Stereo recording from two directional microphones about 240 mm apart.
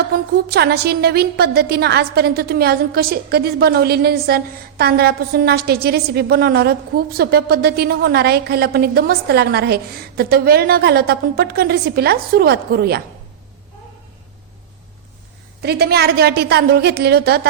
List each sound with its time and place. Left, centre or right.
0.1 s a woman's voice: right
15.6 s a woman's voice: right